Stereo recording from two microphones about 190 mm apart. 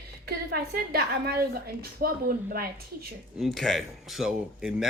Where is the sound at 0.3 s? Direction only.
55° right (ahead or behind).